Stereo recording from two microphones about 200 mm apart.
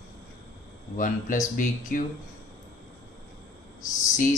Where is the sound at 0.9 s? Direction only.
40° left (ahead or behind).